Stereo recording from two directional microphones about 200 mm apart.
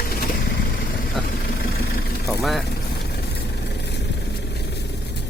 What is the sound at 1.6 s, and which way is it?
Vehicle, 50° left (ahead or behind).